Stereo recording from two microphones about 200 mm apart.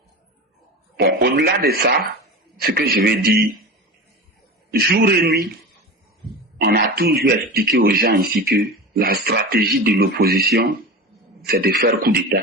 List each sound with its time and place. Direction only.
0.9 s a man's voice: 55° right (ahead or behind)
4.7 s a man's voice: 50° right (ahead or behind)
6.6 s a man's voice: 50° right (ahead or behind)